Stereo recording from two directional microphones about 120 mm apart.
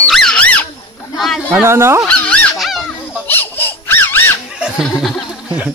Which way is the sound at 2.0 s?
10° left (ahead or behind).